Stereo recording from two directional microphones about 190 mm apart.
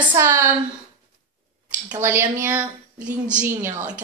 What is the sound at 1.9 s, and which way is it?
A woman's voice, 15° right (ahead or behind).